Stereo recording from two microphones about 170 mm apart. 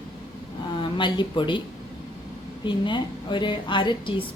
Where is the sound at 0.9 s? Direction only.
30° left (ahead or behind).